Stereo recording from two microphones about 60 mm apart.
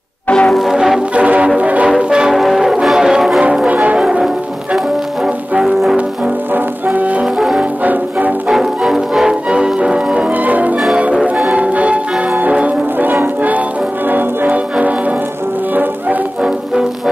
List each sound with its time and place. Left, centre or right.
0.3 s music: centre
0.6 s music: centre
1.1 s music: right
2.3 s music: centre
3.3 s change ringing: centre
5.6 s music: centre
6.5 s music: right
7.3 s music: centre
7.8 s music: right
8.5 s music: centre
10.3 s music: right